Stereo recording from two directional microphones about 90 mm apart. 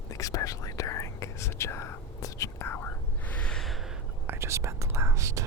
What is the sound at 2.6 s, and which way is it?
Whispering, 25° left (ahead or behind).